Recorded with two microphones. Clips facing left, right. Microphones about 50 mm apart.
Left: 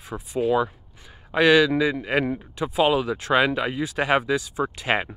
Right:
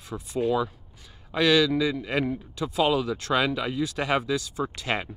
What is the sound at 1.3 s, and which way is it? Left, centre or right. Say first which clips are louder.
Speech: left 4 dB; left.